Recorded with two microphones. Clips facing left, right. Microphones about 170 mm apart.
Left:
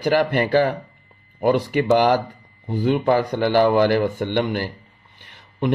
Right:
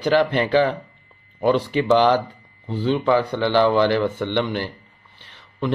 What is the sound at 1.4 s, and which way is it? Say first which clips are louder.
Speech: even; 10° left (ahead or behind).